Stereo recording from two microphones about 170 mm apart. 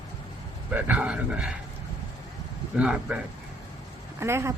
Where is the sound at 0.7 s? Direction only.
10° right (ahead or behind).